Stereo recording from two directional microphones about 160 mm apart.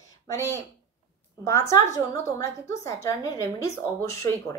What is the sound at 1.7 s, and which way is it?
A woman's voice, 20° left (ahead or behind).